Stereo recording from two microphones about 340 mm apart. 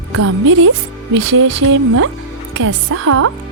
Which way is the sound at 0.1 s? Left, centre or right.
Right.